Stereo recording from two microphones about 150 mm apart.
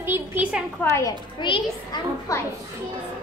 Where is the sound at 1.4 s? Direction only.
30° left (ahead or behind).